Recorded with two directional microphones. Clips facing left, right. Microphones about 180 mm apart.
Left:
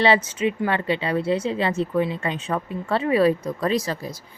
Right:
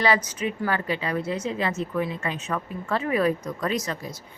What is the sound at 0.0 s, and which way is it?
Speech, 25° left (ahead or behind).